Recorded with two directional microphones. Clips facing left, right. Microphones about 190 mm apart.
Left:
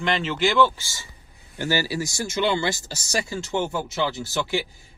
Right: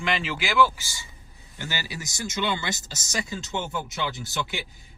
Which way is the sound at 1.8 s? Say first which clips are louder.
Left 7 dB; 20° right (ahead or behind).